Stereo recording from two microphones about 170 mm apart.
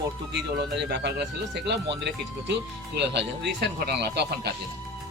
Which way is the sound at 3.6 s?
80° right.